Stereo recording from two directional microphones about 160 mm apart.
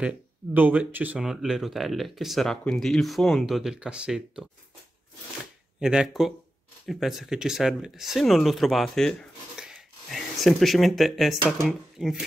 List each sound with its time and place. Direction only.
0.6 s speech: 10° right (ahead or behind)
5.8 s speech: 5° right (ahead or behind)
9.6 s a sound: 5° right (ahead or behind)
11.6 s speech: centre (ahead or behind)